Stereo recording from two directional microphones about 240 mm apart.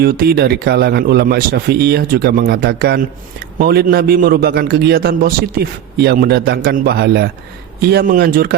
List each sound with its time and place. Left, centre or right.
0.0 s a man's voice: right